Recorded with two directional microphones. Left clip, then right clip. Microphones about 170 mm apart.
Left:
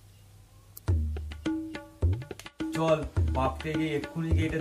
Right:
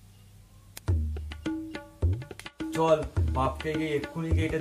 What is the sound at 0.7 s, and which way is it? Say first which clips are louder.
Tabla: even; centre (ahead or behind).